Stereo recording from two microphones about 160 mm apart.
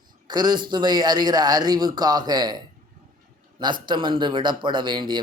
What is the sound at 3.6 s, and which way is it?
Speech, 30° right (ahead or behind).